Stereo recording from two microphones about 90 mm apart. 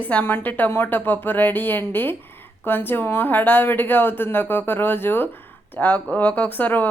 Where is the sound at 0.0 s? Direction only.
20° left (ahead or behind).